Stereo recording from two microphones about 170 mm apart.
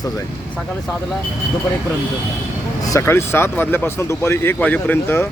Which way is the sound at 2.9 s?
15° left (ahead or behind).